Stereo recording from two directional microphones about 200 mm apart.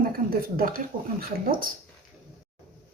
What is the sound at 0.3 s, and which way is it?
Speech, 45° right (ahead or behind).